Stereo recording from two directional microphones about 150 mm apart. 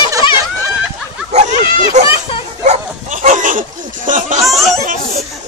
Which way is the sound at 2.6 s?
55° right (ahead or behind).